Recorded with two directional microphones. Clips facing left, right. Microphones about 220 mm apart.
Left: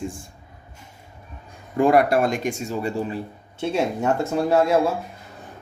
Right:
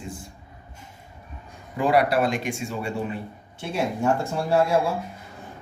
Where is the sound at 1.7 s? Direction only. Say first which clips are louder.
Left 4 dB; 50° left (ahead or behind).